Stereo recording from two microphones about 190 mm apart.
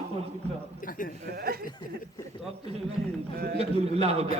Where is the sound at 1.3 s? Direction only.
55° right (ahead or behind).